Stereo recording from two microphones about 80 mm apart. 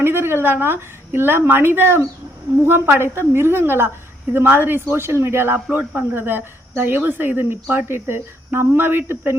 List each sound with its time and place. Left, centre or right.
0.0 s speech: right